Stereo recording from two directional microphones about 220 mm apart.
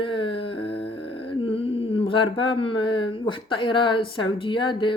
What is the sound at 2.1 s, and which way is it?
Speech, 20° left (ahead or behind).